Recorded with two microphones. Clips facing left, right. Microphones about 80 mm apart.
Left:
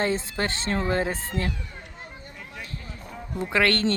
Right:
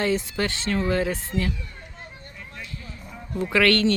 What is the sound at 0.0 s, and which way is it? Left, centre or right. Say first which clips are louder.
Speech: right 2 dB; left.